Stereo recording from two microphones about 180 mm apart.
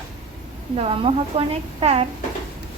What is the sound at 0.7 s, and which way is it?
A woman's voice, 30° right (ahead or behind).